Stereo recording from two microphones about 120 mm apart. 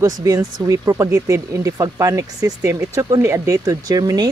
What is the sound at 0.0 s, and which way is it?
Speech, 25° right (ahead or behind).